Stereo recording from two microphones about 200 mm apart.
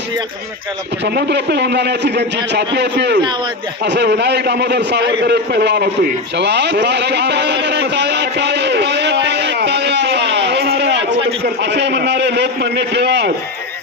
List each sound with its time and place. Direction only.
1.0 s a man's voice: 55° right (ahead or behind)
5.2 s a sound: 55° right (ahead or behind)
11.4 s a man's voice: 60° right (ahead or behind)